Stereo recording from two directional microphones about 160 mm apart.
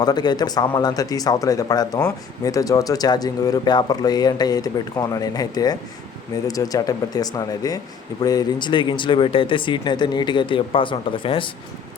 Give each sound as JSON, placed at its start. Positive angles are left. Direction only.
{"t": 0.0, "sound": "speech", "side_deg": 25}